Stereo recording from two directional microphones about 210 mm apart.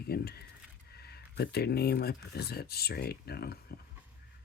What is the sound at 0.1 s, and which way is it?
Speech, 50° left (ahead or behind).